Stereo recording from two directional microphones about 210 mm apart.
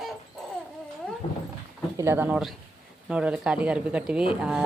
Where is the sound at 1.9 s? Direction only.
10° right (ahead or behind).